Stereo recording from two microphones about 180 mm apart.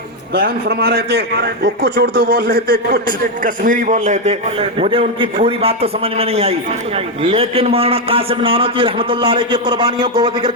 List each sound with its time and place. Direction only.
0.3 s a man's voice: 60° right (ahead or behind); by 10.5 s 25° right (ahead or behind)